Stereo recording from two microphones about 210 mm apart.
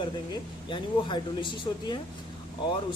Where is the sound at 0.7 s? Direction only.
20° left (ahead or behind).